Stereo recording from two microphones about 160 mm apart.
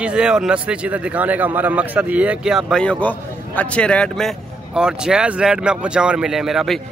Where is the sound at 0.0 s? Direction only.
5° right (ahead or behind).